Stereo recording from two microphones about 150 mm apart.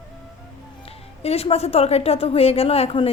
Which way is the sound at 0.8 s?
40° left (ahead or behind).